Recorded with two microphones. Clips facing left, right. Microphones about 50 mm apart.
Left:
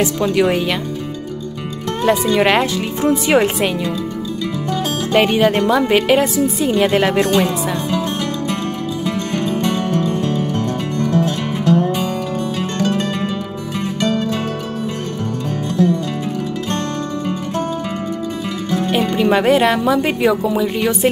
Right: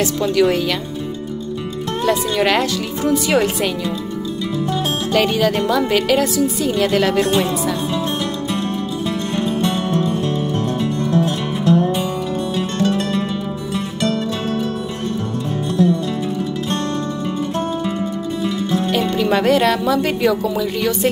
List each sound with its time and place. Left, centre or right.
0.0 s speech: left
2.3 s speech: left
5.1 s speech: left
18.9 s a woman's voice: centre